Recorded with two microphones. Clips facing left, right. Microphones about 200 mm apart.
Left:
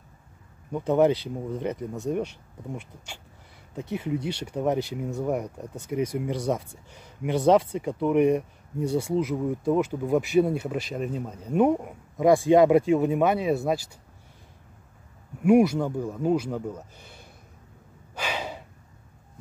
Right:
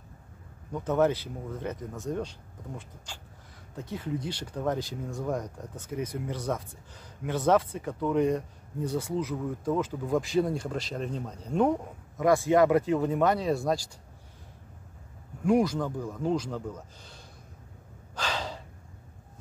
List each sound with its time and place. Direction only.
0.7 s speech: 15° left (ahead or behind)
3.9 s speech: 10° left (ahead or behind)
4.6 s speech: 20° left (ahead or behind)
5.1 s speech: 10° left (ahead or behind)
15.4 s speech: 10° left (ahead or behind)
18.1 s gasp: 10° left (ahead or behind)